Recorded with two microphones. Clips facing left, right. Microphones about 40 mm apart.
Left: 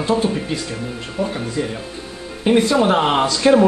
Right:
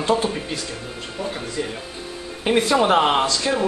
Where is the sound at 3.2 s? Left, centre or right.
Centre.